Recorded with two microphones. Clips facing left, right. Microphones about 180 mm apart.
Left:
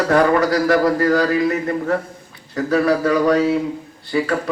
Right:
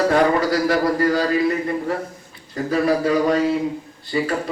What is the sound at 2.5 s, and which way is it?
Speech, 65° left (ahead or behind).